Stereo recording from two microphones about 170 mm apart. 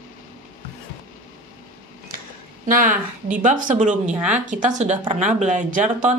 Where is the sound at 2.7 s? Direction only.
55° right (ahead or behind).